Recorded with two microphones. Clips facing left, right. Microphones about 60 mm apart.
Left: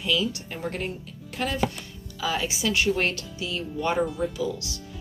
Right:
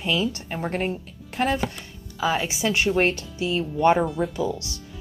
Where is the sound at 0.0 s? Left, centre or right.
Right.